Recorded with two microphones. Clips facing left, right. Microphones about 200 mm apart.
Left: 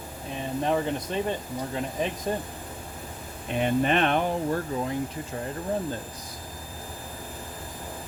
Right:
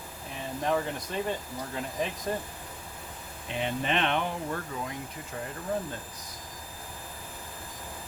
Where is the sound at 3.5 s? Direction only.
50° left (ahead or behind).